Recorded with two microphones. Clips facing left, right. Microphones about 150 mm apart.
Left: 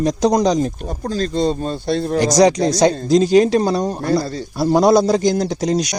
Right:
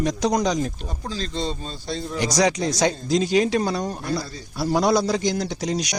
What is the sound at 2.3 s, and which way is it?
Speech, 35° left (ahead or behind).